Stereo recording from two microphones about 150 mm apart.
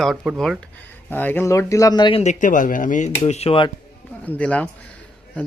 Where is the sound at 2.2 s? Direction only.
60° left (ahead or behind).